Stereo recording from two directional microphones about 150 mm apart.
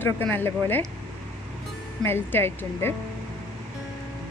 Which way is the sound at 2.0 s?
15° left (ahead or behind).